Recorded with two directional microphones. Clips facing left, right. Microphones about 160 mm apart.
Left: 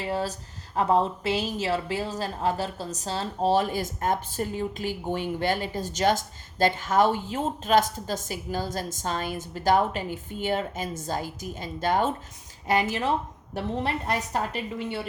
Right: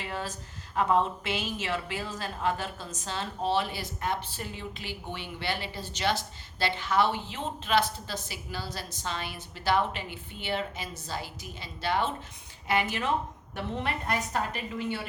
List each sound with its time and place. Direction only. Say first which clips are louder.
0.0 s a woman's voice: left 7 dB; 35° left (ahead or behind)